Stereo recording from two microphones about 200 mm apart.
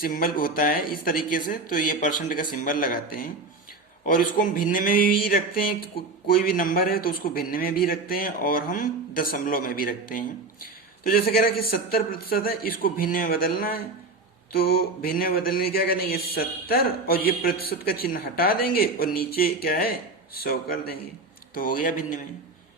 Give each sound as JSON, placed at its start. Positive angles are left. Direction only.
{"t": 0.0, "sound": "a man's voice", "side_deg": 45}